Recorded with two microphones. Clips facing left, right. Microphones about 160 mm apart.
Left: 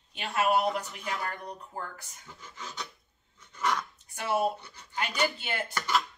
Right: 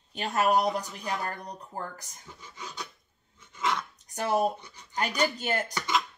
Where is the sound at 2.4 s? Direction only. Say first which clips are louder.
Even; 15° right (ahead or behind).